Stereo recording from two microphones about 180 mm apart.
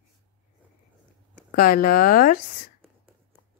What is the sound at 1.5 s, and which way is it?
Speech, 50° left (ahead or behind).